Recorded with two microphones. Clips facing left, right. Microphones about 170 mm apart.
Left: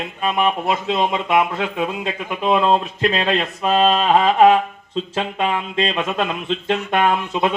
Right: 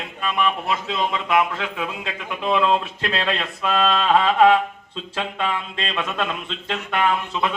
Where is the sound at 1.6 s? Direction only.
35° left (ahead or behind).